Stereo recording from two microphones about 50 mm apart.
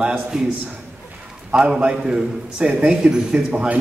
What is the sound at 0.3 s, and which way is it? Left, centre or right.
A man's voice, centre.